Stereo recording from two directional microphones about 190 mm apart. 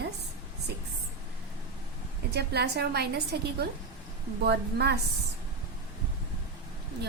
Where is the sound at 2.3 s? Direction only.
60° right (ahead or behind).